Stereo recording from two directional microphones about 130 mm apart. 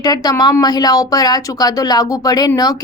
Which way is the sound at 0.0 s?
30° left (ahead or behind).